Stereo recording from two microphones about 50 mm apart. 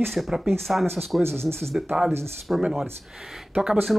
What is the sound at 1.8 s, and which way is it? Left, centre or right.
Speech, centre.